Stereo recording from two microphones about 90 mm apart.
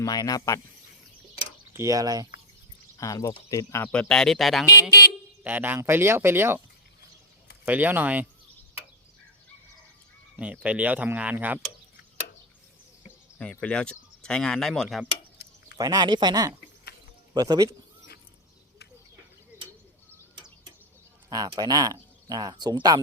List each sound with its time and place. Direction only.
0.0 s speech: 45° left (ahead or behind)
1.7 s speech: 35° right (ahead or behind)
3.0 s speech: 40° left (ahead or behind)
3.9 s speech: 10° left (ahead or behind)
5.4 s speech: 20° right (ahead or behind)
7.6 s speech: 20° right (ahead or behind)
10.3 s speech: 15° right (ahead or behind)
13.4 s speech: 15° left (ahead or behind)
15.8 s speech: 45° right (ahead or behind)
21.2 s speech: 45° right (ahead or behind)